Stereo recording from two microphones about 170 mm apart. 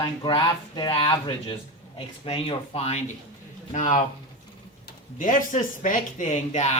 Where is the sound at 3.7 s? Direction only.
50° left (ahead or behind).